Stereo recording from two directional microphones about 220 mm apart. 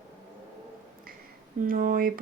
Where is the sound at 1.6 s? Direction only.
40° right (ahead or behind).